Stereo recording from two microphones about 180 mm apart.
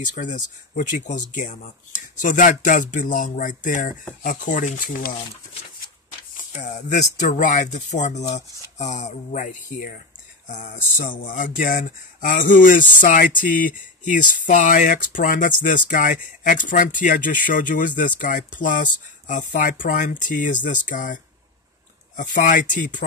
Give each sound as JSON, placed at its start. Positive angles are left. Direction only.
{"t": 0.0, "sound": "speech", "side_deg": 45}
{"t": 6.3, "sound": "speech", "side_deg": 45}